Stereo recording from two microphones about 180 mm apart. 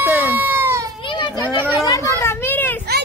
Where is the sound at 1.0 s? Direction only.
25° left (ahead or behind).